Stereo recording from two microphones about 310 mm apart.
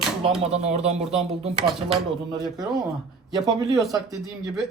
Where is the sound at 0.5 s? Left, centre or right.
Right.